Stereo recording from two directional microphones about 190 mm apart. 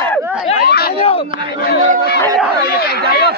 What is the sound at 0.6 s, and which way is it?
Chatter, 55° left (ahead or behind).